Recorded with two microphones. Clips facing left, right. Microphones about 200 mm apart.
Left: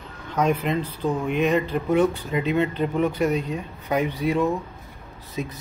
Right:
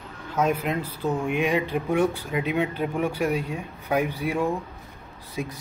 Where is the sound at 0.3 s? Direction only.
5° right (ahead or behind).